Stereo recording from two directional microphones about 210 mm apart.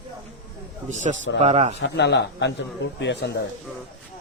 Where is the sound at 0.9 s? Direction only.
35° right (ahead or behind).